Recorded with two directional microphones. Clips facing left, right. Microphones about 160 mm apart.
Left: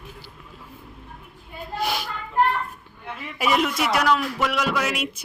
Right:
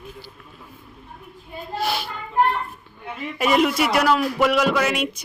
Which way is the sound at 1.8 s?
10° left (ahead or behind).